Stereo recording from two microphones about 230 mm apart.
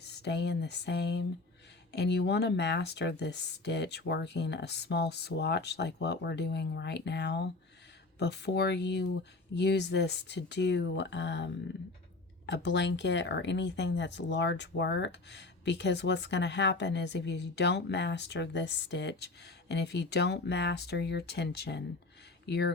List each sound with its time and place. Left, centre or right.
0.1 s speech: left
12.5 s speech: left